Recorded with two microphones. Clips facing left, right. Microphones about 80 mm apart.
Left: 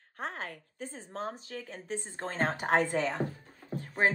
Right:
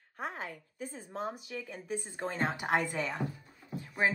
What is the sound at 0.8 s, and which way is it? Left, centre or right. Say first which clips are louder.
Speech: even; left.